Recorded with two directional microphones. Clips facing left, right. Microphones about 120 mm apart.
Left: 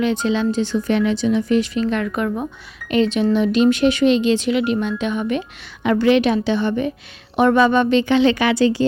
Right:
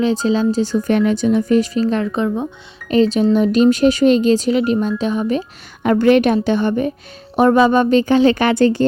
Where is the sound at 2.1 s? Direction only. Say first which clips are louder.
Right 3 dB; 20° right (ahead or behind).